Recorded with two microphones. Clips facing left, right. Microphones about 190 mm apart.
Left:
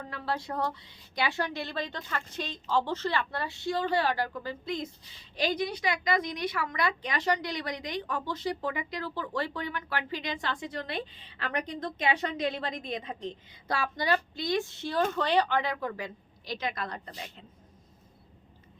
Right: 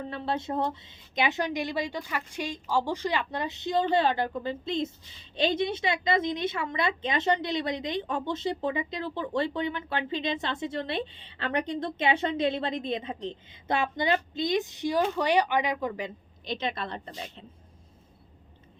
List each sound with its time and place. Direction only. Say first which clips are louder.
0.0 s a woman's voice: right 3 dB; 25° right (ahead or behind)